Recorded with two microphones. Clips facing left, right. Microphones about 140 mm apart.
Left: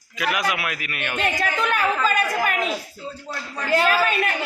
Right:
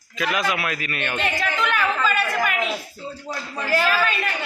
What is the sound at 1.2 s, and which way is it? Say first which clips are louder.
A woman's voice: left 2 dB; 45° left (ahead or behind).